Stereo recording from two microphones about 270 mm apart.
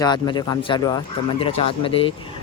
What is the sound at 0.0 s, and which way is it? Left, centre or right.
Speech, centre.